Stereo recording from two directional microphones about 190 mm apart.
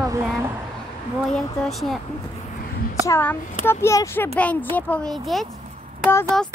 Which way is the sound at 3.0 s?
10° left (ahead or behind).